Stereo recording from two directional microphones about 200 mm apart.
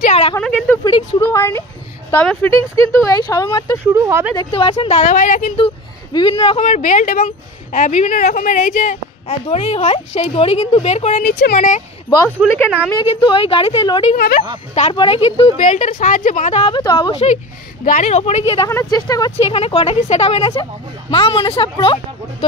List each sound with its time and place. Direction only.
0.0 s a sound: 30° left (ahead or behind)
0.4 s a woman's voice: 5° left (ahead or behind)
3.8 s speech: 15° right (ahead or behind)
4.4 s speech: 25° left (ahead or behind)
6.1 s speech: 25° left (ahead or behind)
9.5 s speech: 30° left (ahead or behind)
12.4 s a woman's voice: 5° right (ahead or behind)
13.0 s a woman's voice: 25° left (ahead or behind)
14.1 s speech: 50° left (ahead or behind)
14.7 s a woman's voice: 30° left (ahead or behind)
17.8 s speech: 40° left (ahead or behind)
18.7 s speech: 15° left (ahead or behind)
19.3 s a woman's voice: 30° left (ahead or behind)